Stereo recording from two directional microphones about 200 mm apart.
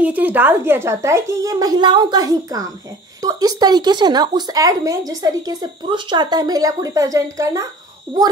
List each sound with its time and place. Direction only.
0.0 s a woman's voice: 10° right (ahead or behind)